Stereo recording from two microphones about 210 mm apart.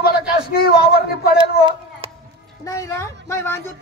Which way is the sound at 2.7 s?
15° left (ahead or behind).